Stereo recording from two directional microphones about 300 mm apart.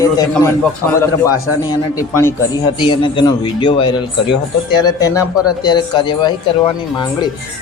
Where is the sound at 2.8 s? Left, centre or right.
Centre.